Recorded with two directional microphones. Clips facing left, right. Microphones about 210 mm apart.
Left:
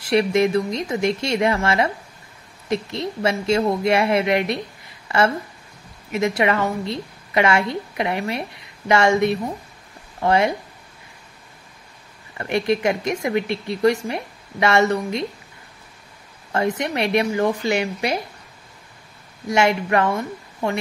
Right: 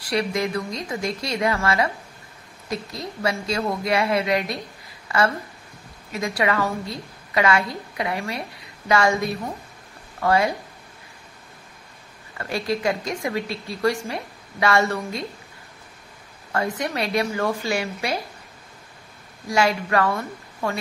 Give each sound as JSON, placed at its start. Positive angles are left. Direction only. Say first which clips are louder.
{"t": 0.0, "sound": "a woman's voice", "louder": "left 6 dB", "side_deg": 25}
{"t": 5.0, "sound": "a sound", "louder": "left 3 dB", "side_deg": 25}
{"t": 6.1, "sound": "a woman's voice", "louder": "left 4 dB", "side_deg": 25}
{"t": 12.4, "sound": "a woman's voice", "louder": "left 5 dB", "side_deg": 20}
{"t": 16.5, "sound": "a woman's voice", "louder": "left 3 dB", "side_deg": 20}
{"t": 19.4, "sound": "a woman's voice", "louder": "left 3 dB", "side_deg": 25}